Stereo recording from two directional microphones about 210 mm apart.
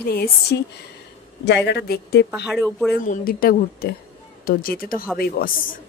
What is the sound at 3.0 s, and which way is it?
Speech, 45° left (ahead or behind).